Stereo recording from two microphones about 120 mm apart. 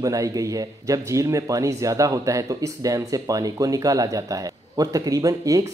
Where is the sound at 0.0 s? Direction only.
30° right (ahead or behind).